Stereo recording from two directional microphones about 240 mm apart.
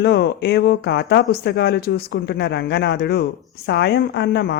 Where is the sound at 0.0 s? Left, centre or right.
Left.